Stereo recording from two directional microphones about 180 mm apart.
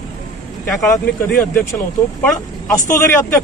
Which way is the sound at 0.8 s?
5° left (ahead or behind).